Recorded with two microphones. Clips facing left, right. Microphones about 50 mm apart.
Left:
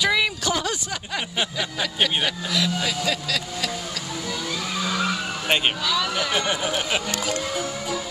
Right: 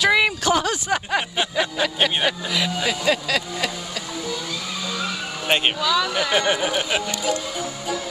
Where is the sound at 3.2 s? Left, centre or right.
Centre.